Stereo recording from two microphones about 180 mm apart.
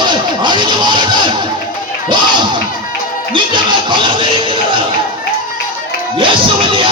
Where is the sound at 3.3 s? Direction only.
25° right (ahead or behind).